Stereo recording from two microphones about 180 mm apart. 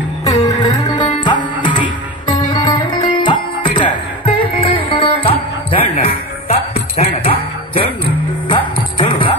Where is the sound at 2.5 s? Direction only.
25° left (ahead or behind).